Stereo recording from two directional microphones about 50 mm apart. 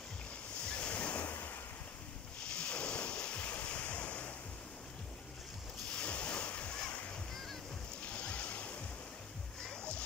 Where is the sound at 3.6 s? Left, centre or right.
Left.